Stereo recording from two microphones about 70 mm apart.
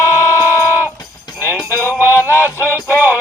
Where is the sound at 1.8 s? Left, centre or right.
Left.